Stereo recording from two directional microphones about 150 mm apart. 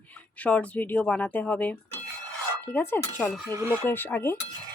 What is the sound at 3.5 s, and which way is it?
Speech, 20° right (ahead or behind).